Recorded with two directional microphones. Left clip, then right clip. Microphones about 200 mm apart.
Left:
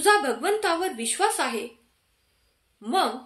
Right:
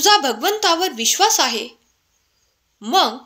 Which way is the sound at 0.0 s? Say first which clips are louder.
Right 6 dB; 45° right (ahead or behind).